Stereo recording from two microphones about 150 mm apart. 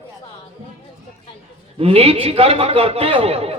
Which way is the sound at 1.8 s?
40° right (ahead or behind).